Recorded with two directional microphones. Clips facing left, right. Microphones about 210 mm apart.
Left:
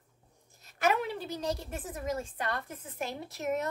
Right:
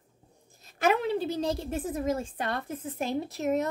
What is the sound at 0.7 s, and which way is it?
A woman's voice, 30° right (ahead or behind).